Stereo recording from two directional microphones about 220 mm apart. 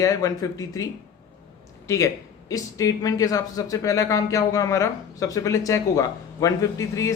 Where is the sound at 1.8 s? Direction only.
15° left (ahead or behind).